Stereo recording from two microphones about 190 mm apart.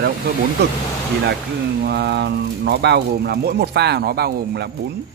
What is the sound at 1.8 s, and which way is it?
Speech, 60° right (ahead or behind).